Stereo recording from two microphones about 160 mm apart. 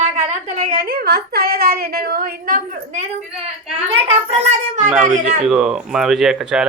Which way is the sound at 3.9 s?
40° right (ahead or behind).